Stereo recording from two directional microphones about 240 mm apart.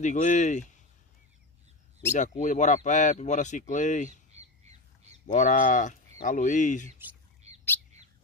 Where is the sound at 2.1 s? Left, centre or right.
Left.